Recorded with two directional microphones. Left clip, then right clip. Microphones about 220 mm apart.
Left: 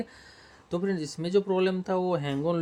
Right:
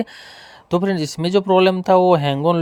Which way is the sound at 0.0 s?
40° right (ahead or behind).